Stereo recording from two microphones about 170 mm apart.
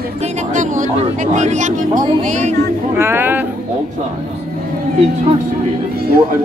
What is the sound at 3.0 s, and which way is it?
Speech, 15° right (ahead or behind).